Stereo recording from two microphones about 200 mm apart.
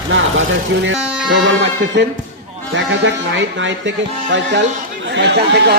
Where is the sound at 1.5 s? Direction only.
60° right (ahead or behind).